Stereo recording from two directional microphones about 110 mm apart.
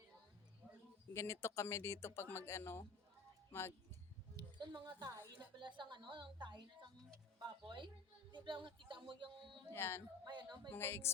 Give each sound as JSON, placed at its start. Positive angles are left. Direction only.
{"t": 1.1, "sound": "speech", "side_deg": 25}
{"t": 4.4, "sound": "a woman's voice", "side_deg": -45}
{"t": 9.7, "sound": "speech", "side_deg": 20}
{"t": 10.2, "sound": "a woman's voice", "side_deg": -40}
{"t": 10.7, "sound": "speech", "side_deg": 20}